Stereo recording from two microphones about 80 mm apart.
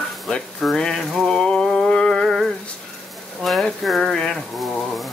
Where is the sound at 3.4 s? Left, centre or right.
Centre.